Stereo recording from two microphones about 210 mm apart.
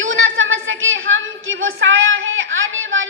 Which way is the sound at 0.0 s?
70° right (ahead or behind).